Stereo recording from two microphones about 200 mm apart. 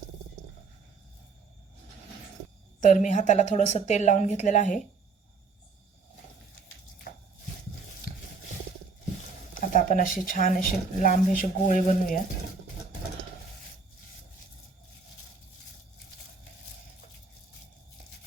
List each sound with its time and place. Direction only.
2.8 s a woman's voice: 35° left (ahead or behind)
9.6 s a woman's voice: 40° left (ahead or behind)